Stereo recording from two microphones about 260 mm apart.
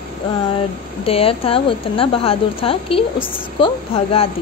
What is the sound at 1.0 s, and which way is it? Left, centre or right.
A woman's voice, left.